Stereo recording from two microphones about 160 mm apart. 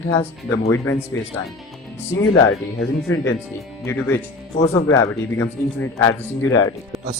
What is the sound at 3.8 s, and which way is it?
Speech, 15° left (ahead or behind).